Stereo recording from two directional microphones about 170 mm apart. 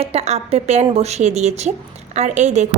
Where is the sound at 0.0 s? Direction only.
40° right (ahead or behind).